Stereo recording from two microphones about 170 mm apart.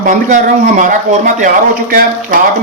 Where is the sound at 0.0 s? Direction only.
50° right (ahead or behind).